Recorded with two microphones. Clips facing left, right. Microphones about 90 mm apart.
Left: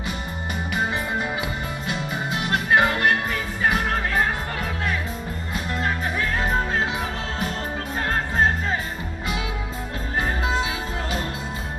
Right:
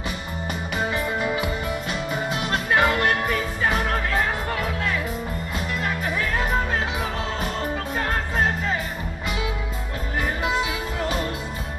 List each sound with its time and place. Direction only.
0.9 s music: 25° left (ahead or behind)
2.7 s music: 25° left (ahead or behind)
10.4 s music: 30° left (ahead or behind)